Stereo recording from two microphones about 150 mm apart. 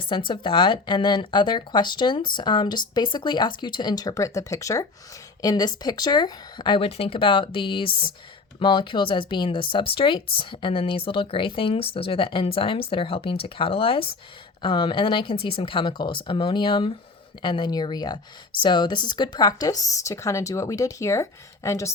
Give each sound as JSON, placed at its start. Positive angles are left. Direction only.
{"t": 0.1, "sound": "speech", "side_deg": 35}